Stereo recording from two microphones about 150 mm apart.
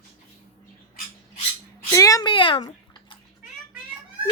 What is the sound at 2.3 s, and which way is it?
Speech, 35° left (ahead or behind).